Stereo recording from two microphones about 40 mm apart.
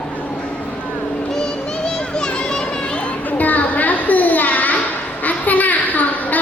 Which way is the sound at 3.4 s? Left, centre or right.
Left.